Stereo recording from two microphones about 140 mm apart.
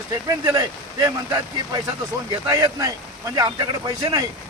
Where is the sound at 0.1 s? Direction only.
25° right (ahead or behind).